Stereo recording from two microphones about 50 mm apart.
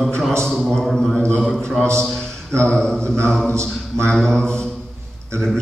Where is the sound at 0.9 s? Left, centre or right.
Centre.